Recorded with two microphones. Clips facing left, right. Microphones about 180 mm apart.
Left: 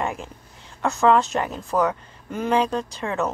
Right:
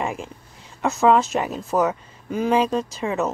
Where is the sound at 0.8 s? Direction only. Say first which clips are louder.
Right 1 dB; 5° right (ahead or behind).